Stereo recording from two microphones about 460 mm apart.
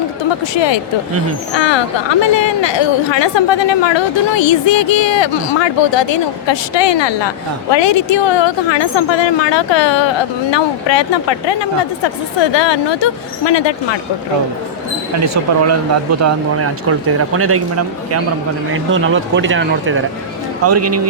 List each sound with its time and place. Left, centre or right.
0.5 s a woman's voice: left
16.2 s a man's voice: right